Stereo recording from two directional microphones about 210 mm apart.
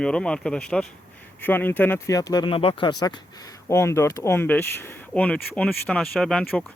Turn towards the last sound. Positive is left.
turn(degrees=0)  # may be behind; listen again after turning